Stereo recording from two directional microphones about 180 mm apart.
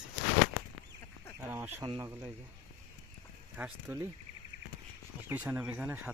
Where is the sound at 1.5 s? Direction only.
10° right (ahead or behind).